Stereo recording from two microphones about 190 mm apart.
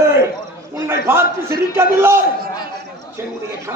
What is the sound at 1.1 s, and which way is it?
A man's voice, 10° right (ahead or behind).